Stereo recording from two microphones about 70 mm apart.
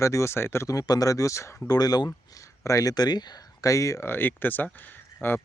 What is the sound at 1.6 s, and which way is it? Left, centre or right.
Speech, left.